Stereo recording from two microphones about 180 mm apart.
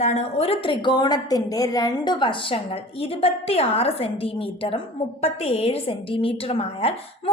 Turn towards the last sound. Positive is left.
turn(degrees=30)  # may be behind; listen again after turning